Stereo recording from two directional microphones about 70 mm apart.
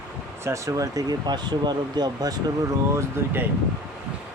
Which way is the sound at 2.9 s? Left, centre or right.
Right.